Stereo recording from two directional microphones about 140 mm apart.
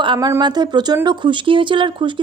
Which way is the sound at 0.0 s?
35° right (ahead or behind).